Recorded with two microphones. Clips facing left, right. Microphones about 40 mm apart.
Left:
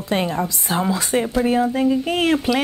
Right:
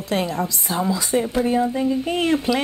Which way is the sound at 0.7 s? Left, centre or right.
Left.